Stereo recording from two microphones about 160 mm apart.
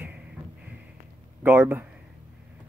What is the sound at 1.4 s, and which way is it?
Speech, 10° right (ahead or behind).